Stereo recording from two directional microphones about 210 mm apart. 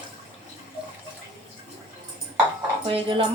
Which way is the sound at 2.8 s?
25° right (ahead or behind).